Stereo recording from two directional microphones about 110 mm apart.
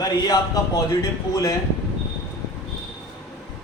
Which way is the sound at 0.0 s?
35° left (ahead or behind).